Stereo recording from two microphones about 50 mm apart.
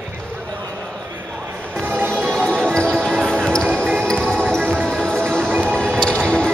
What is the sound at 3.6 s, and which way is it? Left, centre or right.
Music, right.